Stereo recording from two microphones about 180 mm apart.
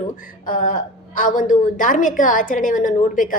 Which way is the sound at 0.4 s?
50° left (ahead or behind).